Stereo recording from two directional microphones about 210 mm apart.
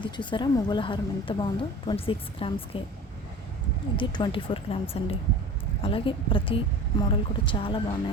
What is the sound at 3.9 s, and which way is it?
A woman's voice, 20° left (ahead or behind).